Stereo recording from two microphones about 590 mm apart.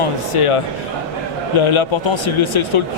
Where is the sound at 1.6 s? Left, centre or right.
Left.